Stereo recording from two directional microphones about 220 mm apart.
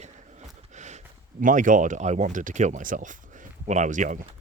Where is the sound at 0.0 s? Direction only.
30° right (ahead or behind).